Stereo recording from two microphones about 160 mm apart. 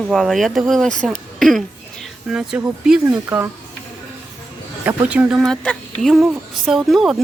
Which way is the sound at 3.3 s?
15° right (ahead or behind).